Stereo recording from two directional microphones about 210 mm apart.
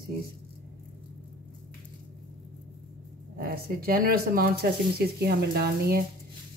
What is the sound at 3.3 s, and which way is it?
Speech, 45° right (ahead or behind).